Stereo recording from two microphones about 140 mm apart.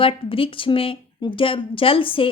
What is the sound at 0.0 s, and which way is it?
A woman's voice, 40° left (ahead or behind).